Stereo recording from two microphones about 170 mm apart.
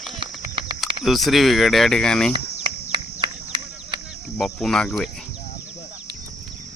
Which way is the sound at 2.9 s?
25° right (ahead or behind).